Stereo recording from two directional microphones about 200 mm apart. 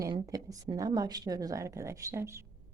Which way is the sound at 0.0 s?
15° right (ahead or behind).